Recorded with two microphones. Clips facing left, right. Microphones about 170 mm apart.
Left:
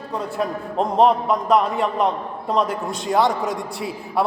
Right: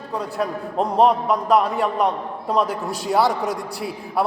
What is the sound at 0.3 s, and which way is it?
A man's voice, centre (ahead or behind).